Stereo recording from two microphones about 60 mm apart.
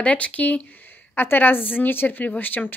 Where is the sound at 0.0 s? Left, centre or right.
Left.